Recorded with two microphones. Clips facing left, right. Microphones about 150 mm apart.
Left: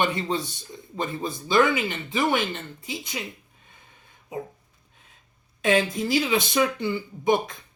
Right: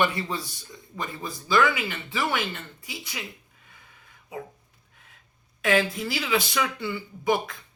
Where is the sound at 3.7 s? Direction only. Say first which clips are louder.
Even; 25° left (ahead or behind).